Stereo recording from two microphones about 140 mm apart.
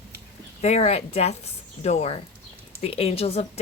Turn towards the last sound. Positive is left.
turn(degrees=45)  # may be behind; listen again after turning